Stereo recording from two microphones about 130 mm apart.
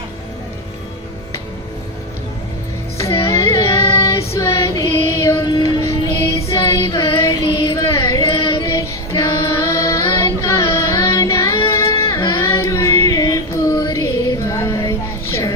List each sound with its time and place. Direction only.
3.2 s music: 20° left (ahead or behind)
4.3 s female singing: 20° left (ahead or behind)
5.5 s music: 35° left (ahead or behind)
5.9 s music: 20° left (ahead or behind)
7.8 s a sound: 25° left (ahead or behind)
8.4 s female singing: 45° left (ahead or behind)
8.6 s child singing: 20° left (ahead or behind)
14.5 s a sound: 25° left (ahead or behind)